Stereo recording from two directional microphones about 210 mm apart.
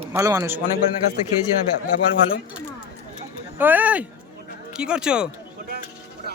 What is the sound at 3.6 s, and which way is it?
Speech, 10° right (ahead or behind).